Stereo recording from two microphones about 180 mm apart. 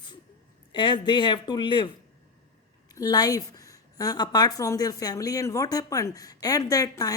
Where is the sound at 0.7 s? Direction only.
25° left (ahead or behind).